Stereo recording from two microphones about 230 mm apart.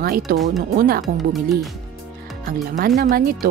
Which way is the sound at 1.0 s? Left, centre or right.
Centre.